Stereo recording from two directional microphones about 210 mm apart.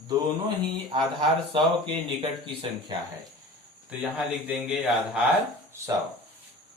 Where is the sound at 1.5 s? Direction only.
25° right (ahead or behind).